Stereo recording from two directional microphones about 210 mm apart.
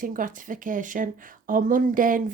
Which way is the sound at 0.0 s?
40° right (ahead or behind).